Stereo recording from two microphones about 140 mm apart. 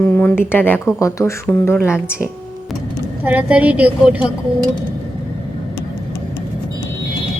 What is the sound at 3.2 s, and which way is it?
Speech, 10° right (ahead or behind).